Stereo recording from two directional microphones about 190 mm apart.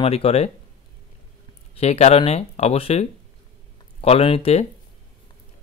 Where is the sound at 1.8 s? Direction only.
35° left (ahead or behind).